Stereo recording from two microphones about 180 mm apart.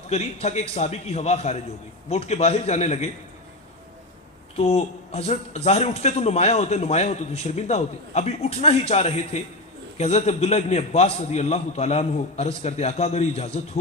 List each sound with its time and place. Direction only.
0.1 s a man's voice: 35° left (ahead or behind)
4.5 s a man's voice: 35° left (ahead or behind)